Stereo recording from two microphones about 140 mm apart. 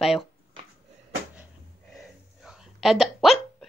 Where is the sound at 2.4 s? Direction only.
5° right (ahead or behind).